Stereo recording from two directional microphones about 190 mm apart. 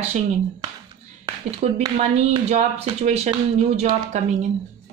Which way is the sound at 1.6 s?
30° right (ahead or behind).